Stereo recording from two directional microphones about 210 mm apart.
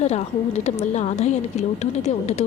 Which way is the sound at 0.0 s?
30° left (ahead or behind).